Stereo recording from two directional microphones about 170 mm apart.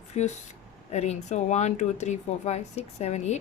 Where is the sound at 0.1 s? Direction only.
40° left (ahead or behind).